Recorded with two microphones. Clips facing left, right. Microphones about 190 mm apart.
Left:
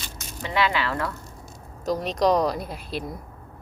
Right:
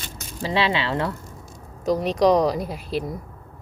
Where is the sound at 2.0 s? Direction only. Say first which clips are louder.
Right 3 dB; 10° right (ahead or behind).